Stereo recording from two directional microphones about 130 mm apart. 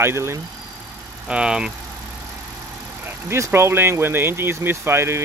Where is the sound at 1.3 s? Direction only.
5° right (ahead or behind).